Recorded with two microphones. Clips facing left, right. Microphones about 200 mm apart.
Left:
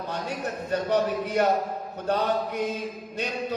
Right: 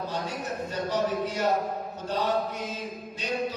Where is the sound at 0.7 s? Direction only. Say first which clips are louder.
Left 4 dB; 60° left (ahead or behind).